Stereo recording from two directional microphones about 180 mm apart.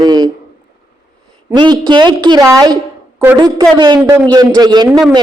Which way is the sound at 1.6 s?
25° right (ahead or behind).